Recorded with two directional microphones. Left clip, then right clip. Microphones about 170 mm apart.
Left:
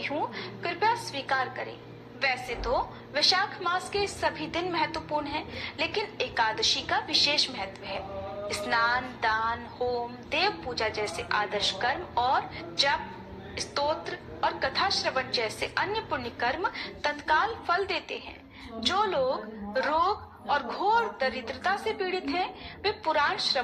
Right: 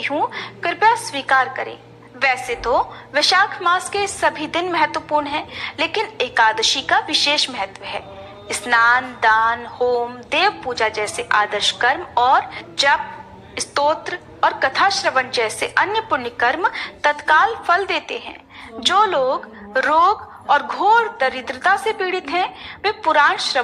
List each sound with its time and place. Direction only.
0.0 s a woman's voice: 45° right (ahead or behind)